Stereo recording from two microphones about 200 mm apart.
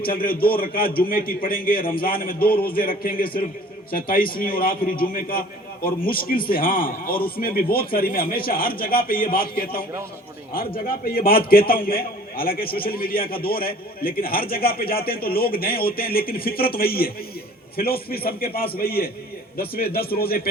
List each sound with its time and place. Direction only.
0.0 s a man's voice: 45° left (ahead or behind)
10.8 s a man's voice: 45° left (ahead or behind)